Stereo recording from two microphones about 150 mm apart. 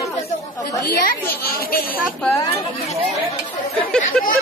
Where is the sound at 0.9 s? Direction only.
90° left.